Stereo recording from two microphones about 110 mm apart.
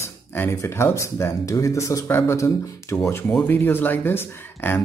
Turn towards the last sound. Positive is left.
turn(degrees=20)  # may be behind; listen again after turning